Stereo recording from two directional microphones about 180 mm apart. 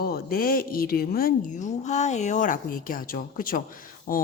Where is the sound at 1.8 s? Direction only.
40° left (ahead or behind).